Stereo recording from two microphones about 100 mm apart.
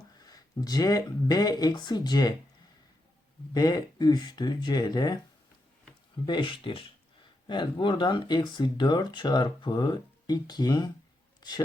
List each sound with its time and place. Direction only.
0.2 s speech: 40° left (ahead or behind)
3.5 s speech: 45° left (ahead or behind)
6.2 s speech: 55° left (ahead or behind)